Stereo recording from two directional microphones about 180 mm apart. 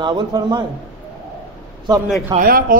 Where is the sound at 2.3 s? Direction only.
50° right (ahead or behind).